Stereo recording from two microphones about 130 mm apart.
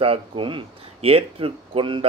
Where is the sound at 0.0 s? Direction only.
45° right (ahead or behind).